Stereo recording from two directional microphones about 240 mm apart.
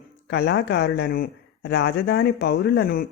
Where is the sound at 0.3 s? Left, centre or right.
Left.